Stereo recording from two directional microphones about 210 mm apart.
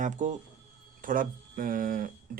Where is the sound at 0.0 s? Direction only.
35° right (ahead or behind).